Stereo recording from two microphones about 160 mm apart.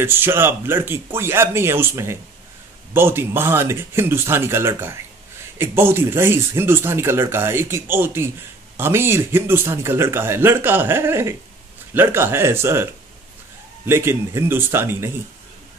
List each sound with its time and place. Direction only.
0.0 s speech: 15° right (ahead or behind)
13.8 s speech: 15° right (ahead or behind)